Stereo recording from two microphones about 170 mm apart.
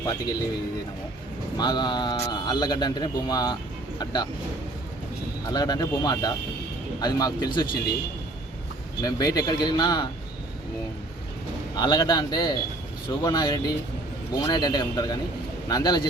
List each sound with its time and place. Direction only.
1.5 s speech: 25° left (ahead or behind)
5.5 s speech: 25° left (ahead or behind)
9.0 s speech: 20° left (ahead or behind)
11.8 s speech: 25° left (ahead or behind)